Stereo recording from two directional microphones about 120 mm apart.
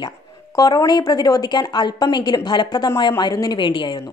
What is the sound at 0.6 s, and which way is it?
Speech, 30° left (ahead or behind).